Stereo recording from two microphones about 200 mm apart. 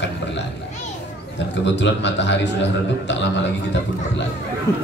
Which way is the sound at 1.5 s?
65° left (ahead or behind).